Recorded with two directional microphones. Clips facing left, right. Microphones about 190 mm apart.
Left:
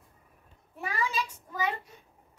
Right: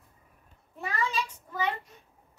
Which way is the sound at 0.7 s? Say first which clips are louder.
Even; 10° left (ahead or behind).